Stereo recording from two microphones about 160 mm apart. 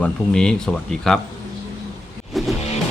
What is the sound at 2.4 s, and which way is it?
Vehicle, centre (ahead or behind).